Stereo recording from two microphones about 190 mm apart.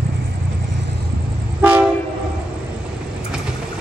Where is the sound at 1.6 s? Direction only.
10° right (ahead or behind).